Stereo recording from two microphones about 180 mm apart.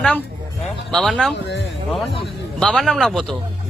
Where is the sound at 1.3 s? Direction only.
75° left (ahead or behind).